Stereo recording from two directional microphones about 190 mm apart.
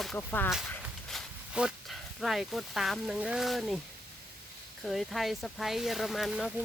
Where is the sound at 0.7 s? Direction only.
Centre (ahead or behind).